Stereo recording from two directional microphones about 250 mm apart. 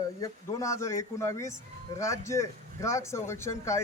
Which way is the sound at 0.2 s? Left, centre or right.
Centre.